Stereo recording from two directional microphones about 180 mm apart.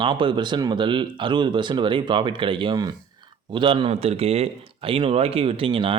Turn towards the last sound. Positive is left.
turn(degrees=-30)  # may be behind; listen again after turning